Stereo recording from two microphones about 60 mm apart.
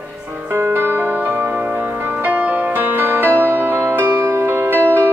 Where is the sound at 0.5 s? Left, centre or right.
Right.